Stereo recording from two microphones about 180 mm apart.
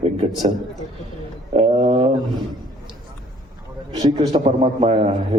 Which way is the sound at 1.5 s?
35° right (ahead or behind).